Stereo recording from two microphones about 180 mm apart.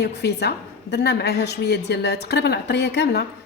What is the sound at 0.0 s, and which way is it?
Speech, 65° left (ahead or behind).